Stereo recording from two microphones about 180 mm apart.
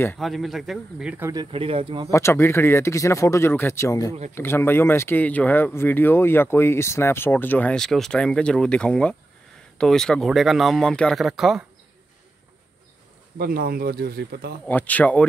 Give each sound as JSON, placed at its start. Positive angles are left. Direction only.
{"t": 0.2, "sound": "speech", "side_deg": 0}
{"t": 1.3, "sound": "speech", "side_deg": -25}
{"t": 2.0, "sound": "speech", "side_deg": 15}
{"t": 13.4, "sound": "speech", "side_deg": -55}
{"t": 14.7, "sound": "speech", "side_deg": 10}